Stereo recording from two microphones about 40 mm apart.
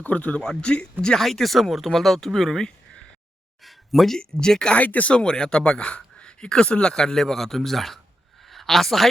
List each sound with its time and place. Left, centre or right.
0.0 s speech: left
1.2 s speech: centre
3.6 s speech: centre
4.4 s speech: centre
4.8 s speech: left
5.1 s speech: left; by 9.0 s centre